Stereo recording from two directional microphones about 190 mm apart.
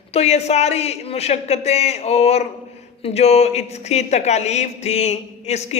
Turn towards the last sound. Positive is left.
turn(degrees=35)  # may be behind; listen again after turning